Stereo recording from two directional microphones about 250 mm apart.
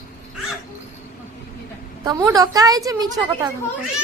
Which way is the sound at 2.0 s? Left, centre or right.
Centre.